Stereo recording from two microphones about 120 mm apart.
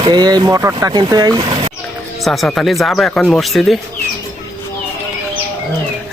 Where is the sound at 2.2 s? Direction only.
Centre (ahead or behind).